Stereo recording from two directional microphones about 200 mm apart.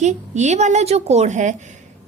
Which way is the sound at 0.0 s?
35° right (ahead or behind).